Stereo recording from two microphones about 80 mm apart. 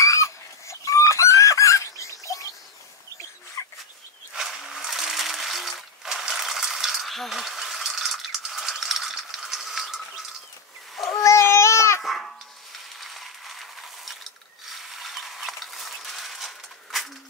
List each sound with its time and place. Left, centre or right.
0.0 s chicken: left
3.6 s dog: left
4.3 s a sound: centre
11.1 s babbling: left
12.0 s babbling: centre
13.0 s a sound: centre
14.7 s mechanisms: centre